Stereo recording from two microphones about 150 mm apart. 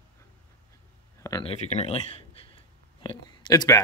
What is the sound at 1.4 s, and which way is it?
Speech, 50° left (ahead or behind).